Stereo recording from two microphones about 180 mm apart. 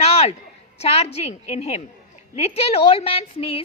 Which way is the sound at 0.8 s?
35° left (ahead or behind).